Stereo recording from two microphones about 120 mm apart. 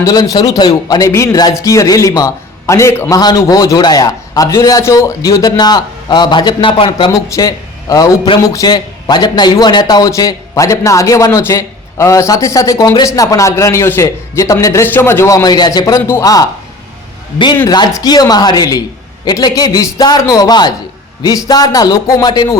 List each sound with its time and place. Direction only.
0.0 s a man's voice: 30° left (ahead or behind)
3.2 s a man's voice: 35° left (ahead or behind)
7.1 s a man's voice: 30° left (ahead or behind)
17.7 s a man's voice: 35° left (ahead or behind)